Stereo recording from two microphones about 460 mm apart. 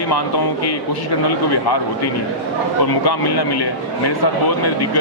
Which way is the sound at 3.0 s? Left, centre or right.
Left.